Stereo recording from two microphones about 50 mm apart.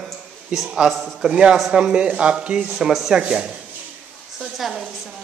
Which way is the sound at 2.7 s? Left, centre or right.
Centre.